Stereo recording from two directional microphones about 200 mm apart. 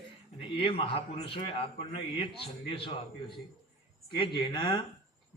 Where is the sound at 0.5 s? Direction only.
25° left (ahead or behind).